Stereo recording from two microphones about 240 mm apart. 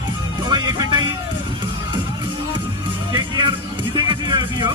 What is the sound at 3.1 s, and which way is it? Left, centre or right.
Music, centre.